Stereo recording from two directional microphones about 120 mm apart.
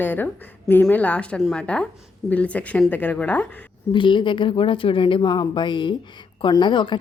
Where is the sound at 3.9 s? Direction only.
40° left (ahead or behind).